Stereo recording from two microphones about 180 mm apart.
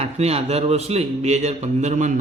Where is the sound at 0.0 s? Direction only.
35° right (ahead or behind).